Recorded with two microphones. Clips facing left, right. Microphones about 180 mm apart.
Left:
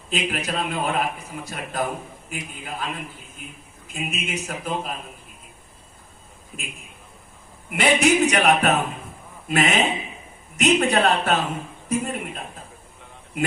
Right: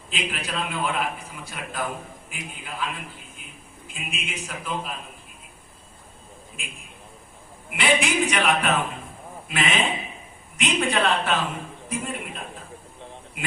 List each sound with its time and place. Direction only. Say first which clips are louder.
0.1 s a man's voice: left 5 dB; 45° left (ahead or behind)
6.6 s a man's voice: left 5 dB; 40° left (ahead or behind)